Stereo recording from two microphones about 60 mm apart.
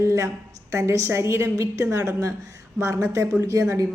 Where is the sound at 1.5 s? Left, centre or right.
Right.